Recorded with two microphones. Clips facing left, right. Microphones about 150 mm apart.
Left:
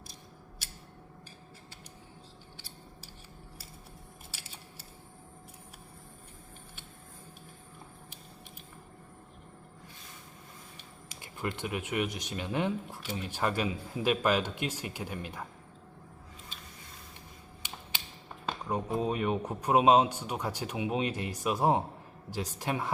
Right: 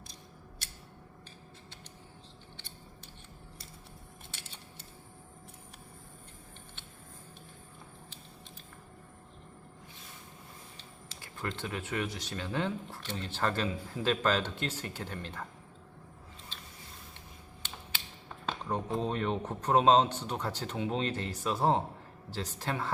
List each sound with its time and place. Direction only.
0.6 s a sound: 5° left (ahead or behind)
2.6 s scissors: 10° left (ahead or behind)
4.3 s a sound: 5° left (ahead or behind)
10.8 s speech: 15° left (ahead or behind)
17.6 s creak: 10° left (ahead or behind)
18.4 s speech: 10° left (ahead or behind)